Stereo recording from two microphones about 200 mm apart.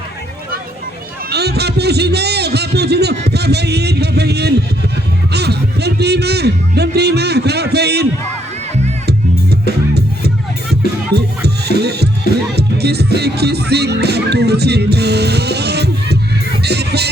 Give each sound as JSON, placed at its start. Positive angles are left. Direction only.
{"t": 1.3, "sound": "a sound", "side_deg": -55}
{"t": 3.3, "sound": "a man's voice", "side_deg": -55}
{"t": 9.0, "sound": "music", "side_deg": -55}
{"t": 12.5, "sound": "speech", "side_deg": -55}
{"t": 16.6, "sound": "music", "side_deg": -55}